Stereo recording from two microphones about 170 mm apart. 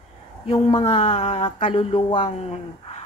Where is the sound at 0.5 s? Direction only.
30° left (ahead or behind).